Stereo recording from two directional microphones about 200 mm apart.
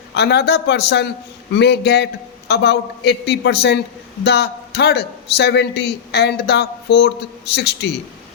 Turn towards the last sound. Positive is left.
turn(degrees=55)  # may be behind; listen again after turning